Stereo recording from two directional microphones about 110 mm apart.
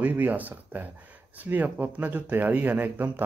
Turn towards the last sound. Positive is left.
turn(degrees=-15)  # may be behind; listen again after turning